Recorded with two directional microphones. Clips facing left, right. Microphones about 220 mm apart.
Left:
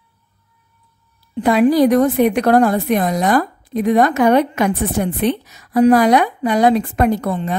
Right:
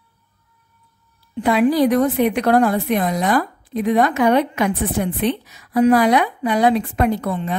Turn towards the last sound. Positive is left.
turn(degrees=40)  # may be behind; listen again after turning